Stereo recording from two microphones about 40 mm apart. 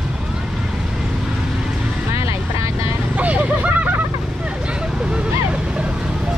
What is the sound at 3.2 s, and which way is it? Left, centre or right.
Vehicle, right.